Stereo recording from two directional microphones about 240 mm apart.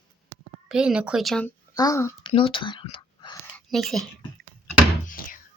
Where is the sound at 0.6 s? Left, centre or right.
Centre.